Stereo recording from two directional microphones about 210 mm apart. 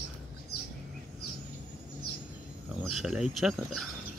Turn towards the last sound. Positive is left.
turn(degrees=0)  # may be behind; listen again after turning